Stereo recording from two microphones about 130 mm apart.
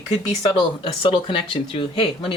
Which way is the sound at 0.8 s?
45° left (ahead or behind).